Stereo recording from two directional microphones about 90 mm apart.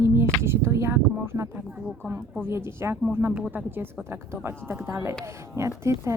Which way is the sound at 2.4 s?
25° right (ahead or behind).